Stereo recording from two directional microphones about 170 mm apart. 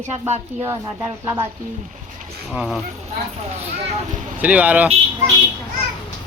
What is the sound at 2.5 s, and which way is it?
Speech, 5° right (ahead or behind).